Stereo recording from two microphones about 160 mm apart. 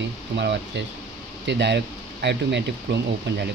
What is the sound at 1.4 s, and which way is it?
Speech, 90° right.